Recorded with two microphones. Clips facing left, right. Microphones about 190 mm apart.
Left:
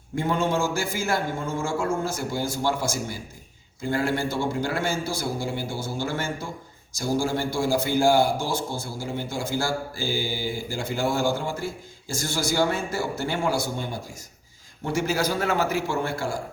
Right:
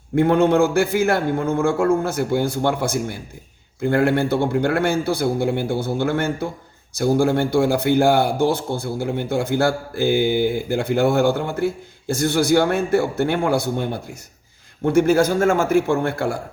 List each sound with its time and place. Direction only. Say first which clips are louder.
0.2 s a man's voice: right 9 dB; 60° right (ahead or behind)